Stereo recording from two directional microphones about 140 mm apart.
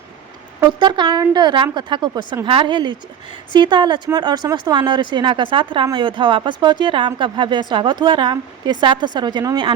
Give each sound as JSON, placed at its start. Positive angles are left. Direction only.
{"t": 0.8, "sound": "speech", "side_deg": -35}